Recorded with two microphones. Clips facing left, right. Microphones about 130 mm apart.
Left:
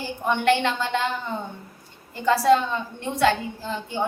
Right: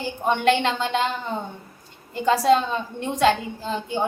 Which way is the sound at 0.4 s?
20° right (ahead or behind).